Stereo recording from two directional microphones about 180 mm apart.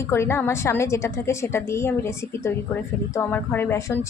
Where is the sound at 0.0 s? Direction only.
15° left (ahead or behind).